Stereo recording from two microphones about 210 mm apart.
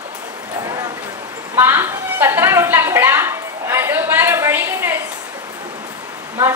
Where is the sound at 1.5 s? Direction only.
10° right (ahead or behind).